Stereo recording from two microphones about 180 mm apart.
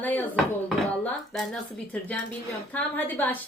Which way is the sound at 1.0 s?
Centre (ahead or behind).